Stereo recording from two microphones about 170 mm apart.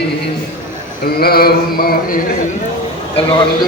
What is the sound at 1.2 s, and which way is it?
Mantra, 65° left (ahead or behind).